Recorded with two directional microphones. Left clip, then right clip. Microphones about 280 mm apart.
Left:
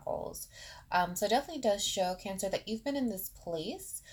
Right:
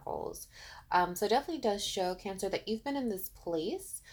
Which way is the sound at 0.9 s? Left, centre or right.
Right.